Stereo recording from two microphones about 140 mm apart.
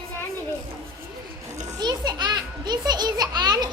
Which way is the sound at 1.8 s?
30° right (ahead or behind).